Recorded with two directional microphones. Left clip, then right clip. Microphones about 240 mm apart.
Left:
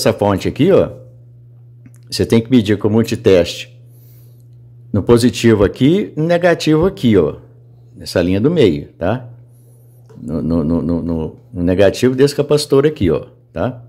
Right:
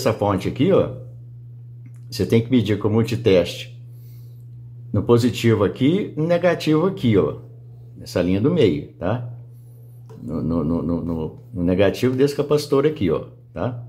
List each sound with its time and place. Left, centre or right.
0.0 s speech: left
2.0 s speech: left
4.9 s speech: left
10.2 s speech: centre